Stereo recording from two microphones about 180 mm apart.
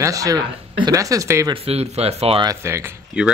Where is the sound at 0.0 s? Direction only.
20° right (ahead or behind).